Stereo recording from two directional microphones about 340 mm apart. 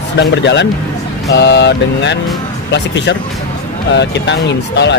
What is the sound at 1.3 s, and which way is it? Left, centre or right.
Mantra, left.